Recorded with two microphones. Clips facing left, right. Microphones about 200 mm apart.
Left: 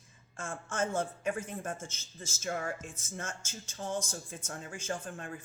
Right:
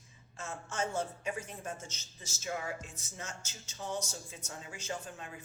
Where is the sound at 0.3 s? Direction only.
50° left (ahead or behind).